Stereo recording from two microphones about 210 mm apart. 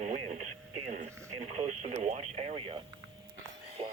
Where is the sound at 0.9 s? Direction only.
35° right (ahead or behind).